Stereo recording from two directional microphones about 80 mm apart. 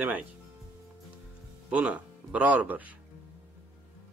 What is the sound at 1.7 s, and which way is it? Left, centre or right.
Speech, centre.